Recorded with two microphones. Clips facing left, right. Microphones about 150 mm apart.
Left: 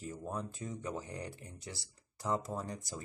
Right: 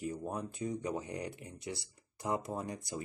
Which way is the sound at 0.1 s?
15° right (ahead or behind).